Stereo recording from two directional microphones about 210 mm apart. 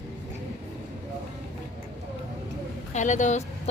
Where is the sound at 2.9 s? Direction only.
35° left (ahead or behind).